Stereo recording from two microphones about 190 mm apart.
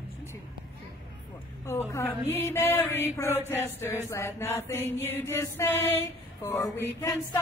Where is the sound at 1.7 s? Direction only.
15° left (ahead or behind).